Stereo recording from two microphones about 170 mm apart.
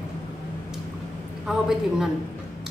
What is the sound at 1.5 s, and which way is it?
Speech, 5° right (ahead or behind).